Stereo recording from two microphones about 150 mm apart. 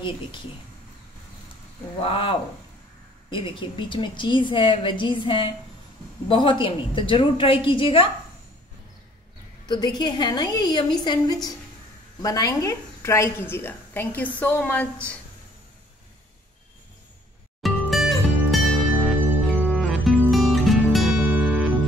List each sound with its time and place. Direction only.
2.0 s a woman's voice: 35° left (ahead or behind)
9.7 s a woman's voice: 30° left (ahead or behind); by 14.9 s 10° left (ahead or behind)
17.6 s music: centre (ahead or behind)